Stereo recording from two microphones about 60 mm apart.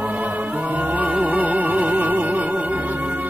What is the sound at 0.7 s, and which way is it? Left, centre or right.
Music, right.